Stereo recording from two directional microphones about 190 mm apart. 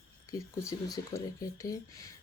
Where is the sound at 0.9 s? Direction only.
20° left (ahead or behind).